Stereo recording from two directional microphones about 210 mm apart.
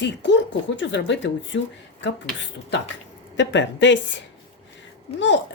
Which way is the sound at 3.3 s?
60° left (ahead or behind).